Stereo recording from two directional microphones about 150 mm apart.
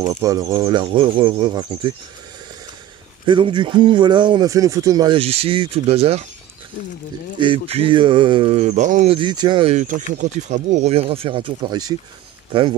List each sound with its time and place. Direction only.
0.0 s speech: 25° right (ahead or behind)
3.3 s a man's voice: 35° right (ahead or behind)
7.3 s a man's voice: 35° right (ahead or behind); by 9.1 s 55° right (ahead or behind)
9.1 s a man's voice: 30° right (ahead or behind)
9.7 s a man's voice: 55° right (ahead or behind); by 12.7 s 35° right (ahead or behind)